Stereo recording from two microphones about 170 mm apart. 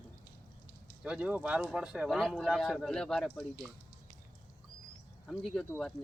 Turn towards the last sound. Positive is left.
turn(degrees=5)  # may be behind; listen again after turning